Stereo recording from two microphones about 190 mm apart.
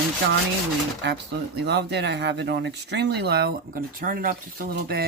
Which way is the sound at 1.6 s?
65° right (ahead or behind).